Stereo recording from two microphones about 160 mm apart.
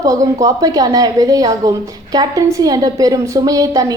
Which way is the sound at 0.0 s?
20° right (ahead or behind).